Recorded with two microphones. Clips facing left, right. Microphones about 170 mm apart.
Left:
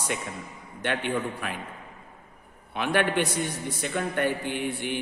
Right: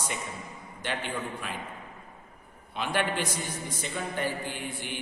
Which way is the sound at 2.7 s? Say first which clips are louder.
Left 4 dB; 60° left (ahead or behind).